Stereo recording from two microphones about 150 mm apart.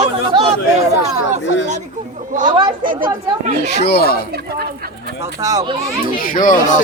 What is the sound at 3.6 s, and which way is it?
Speech, 90° left.